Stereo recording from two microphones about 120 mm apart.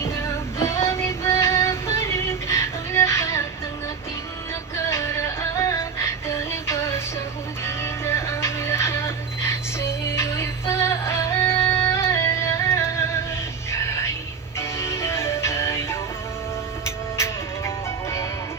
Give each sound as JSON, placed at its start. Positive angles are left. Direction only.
{"t": 0.0, "sound": "music", "side_deg": 20}
{"t": 4.9, "sound": "music", "side_deg": 25}
{"t": 14.6, "sound": "music", "side_deg": 20}